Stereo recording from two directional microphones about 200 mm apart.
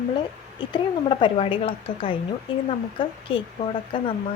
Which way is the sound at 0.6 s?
25° left (ahead or behind).